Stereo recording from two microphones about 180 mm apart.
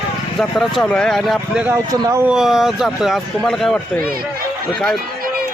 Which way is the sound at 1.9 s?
15° right (ahead or behind).